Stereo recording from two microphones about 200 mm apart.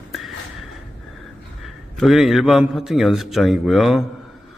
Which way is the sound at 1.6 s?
Centre (ahead or behind).